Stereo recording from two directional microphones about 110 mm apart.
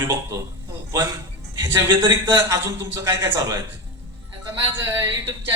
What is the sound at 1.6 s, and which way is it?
A man's voice, 20° right (ahead or behind).